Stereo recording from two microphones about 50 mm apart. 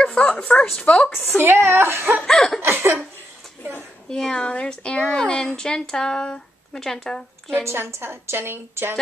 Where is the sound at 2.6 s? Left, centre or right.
Right.